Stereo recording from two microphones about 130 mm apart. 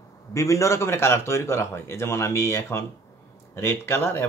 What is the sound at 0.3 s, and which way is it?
A man's voice, 25° left (ahead or behind).